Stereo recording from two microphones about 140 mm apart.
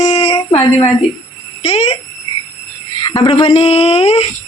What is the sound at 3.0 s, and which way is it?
Speech, 35° left (ahead or behind).